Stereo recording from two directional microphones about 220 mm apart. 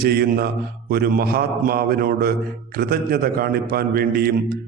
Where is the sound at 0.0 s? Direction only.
45° right (ahead or behind).